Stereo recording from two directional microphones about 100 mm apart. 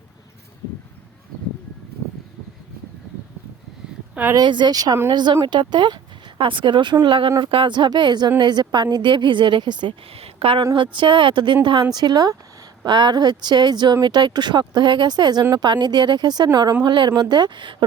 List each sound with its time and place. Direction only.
4.1 s speech: 15° right (ahead or behind)
4.4 s speech: 50° right (ahead or behind)
10.2 s speech: 75° right (ahead or behind)
10.9 s speech: 55° right (ahead or behind)